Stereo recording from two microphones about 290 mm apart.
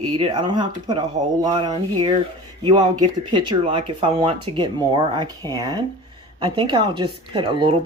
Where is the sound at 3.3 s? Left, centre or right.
Centre.